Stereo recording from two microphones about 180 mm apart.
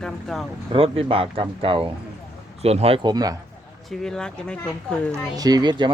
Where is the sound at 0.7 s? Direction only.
30° right (ahead or behind).